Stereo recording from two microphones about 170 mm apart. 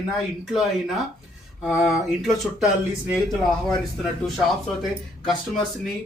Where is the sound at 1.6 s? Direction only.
Centre (ahead or behind).